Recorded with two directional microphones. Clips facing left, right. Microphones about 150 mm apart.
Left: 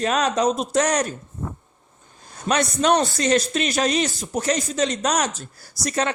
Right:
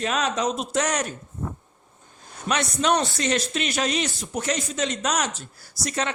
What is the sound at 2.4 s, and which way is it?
A man's voice, 40° left (ahead or behind).